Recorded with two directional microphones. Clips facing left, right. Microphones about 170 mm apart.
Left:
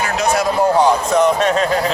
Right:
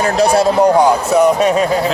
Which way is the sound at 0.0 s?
35° right (ahead or behind).